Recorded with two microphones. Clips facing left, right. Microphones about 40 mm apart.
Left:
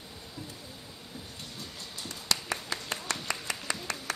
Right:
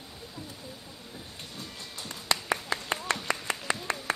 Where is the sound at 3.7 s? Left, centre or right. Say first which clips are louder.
Right 5 dB; right.